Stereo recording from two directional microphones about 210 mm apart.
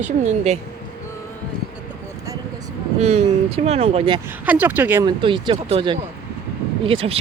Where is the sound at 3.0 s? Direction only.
30° right (ahead or behind).